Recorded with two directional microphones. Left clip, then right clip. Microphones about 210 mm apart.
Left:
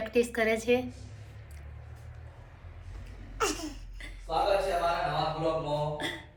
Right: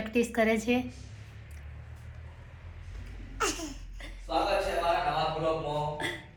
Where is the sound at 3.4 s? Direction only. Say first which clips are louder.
Even; 15° left (ahead or behind).